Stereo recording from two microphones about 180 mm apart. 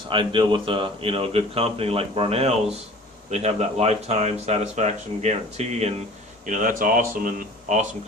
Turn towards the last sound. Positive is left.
turn(degrees=-45)  # may be behind; listen again after turning